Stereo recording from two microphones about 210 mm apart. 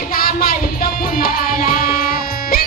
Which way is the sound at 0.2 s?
45° left (ahead or behind).